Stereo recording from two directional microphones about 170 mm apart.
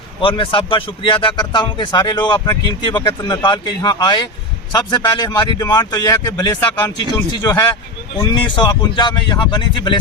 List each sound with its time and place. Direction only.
0.2 s a man's voice: 30° left (ahead or behind)